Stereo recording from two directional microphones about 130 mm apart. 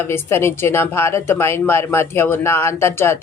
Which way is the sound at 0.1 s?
20° left (ahead or behind).